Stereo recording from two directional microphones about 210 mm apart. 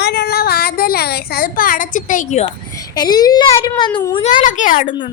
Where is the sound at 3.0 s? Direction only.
20° left (ahead or behind).